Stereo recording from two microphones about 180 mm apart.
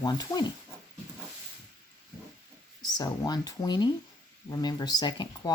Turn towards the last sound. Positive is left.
turn(degrees=25)  # may be behind; listen again after turning